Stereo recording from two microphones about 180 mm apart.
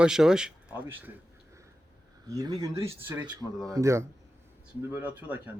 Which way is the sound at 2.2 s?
20° right (ahead or behind).